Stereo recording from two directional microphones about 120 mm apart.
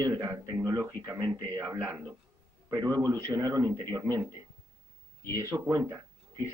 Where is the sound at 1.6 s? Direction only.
20° right (ahead or behind).